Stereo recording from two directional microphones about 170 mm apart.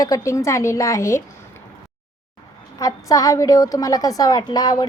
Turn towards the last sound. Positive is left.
turn(degrees=20)  # may be behind; listen again after turning